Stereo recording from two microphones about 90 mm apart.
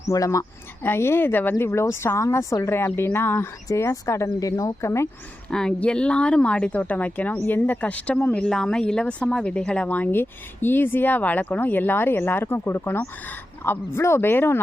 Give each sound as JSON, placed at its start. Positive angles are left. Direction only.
{"t": 0.1, "sound": "speech", "side_deg": 40}
{"t": 0.8, "sound": "speech", "side_deg": 25}
{"t": 5.5, "sound": "speech", "side_deg": 10}